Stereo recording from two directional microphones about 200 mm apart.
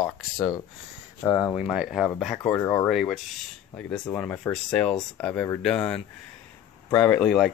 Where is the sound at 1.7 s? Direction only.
5° right (ahead or behind).